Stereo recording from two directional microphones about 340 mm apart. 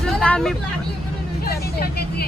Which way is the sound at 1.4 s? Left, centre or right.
Left.